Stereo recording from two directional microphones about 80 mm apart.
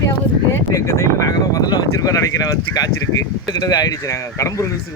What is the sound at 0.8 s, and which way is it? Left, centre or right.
Speech, left.